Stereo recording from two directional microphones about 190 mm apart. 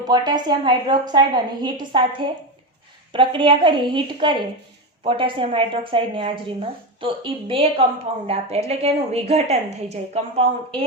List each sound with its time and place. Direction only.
0.0 s a woman's voice: 20° right (ahead or behind)